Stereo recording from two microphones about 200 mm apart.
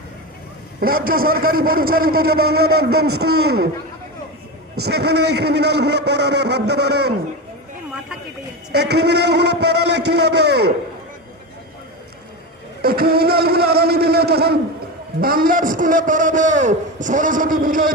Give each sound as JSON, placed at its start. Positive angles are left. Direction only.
{"t": 0.8, "sound": "a man's voice", "side_deg": -45}
{"t": 4.9, "sound": "a man's voice", "side_deg": -55}
{"t": 8.7, "sound": "a man's voice", "side_deg": -55}
{"t": 12.8, "sound": "a man's voice", "side_deg": -50}